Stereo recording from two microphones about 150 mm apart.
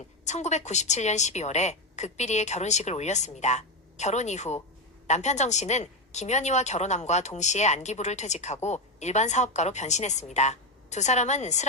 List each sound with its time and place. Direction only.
0.3 s a woman's voice: 50° left (ahead or behind)